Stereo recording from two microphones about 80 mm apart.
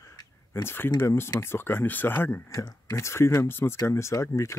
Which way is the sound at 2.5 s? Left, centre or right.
Left.